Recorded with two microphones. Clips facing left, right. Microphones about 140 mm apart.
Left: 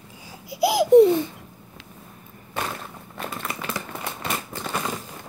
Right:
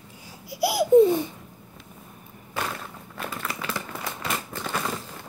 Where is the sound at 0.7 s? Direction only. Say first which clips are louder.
Left 3 dB; 85° left.